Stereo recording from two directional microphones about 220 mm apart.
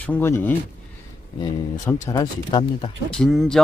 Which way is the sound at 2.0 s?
15° left (ahead or behind).